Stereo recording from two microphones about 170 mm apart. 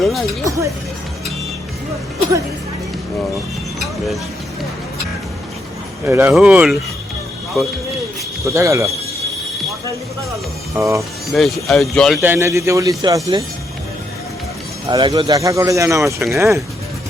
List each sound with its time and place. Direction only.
0.0 s music: centre (ahead or behind)
6.1 s speech: 15° right (ahead or behind)
8.4 s speech: 15° right (ahead or behind)
10.8 s speech: 15° right (ahead or behind)
11.3 s speech: centre (ahead or behind)
12.2 s a man's voice: 15° right (ahead or behind)
14.8 s speech: 25° right (ahead or behind)